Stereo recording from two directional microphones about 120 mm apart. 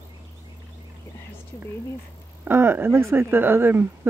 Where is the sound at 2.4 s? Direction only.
15° right (ahead or behind).